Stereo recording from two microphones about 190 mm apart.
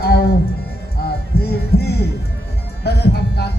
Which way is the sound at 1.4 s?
55° left (ahead or behind).